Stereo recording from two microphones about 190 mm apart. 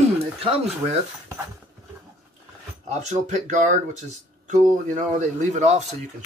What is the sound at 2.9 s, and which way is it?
Speech, 40° right (ahead or behind).